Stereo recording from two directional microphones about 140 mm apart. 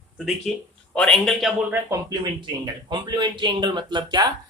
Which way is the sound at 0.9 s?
5° left (ahead or behind).